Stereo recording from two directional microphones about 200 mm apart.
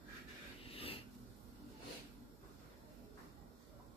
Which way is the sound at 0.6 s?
30° left (ahead or behind).